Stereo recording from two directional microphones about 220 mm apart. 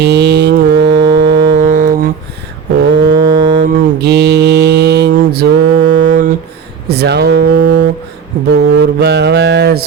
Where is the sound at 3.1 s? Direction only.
55° right (ahead or behind).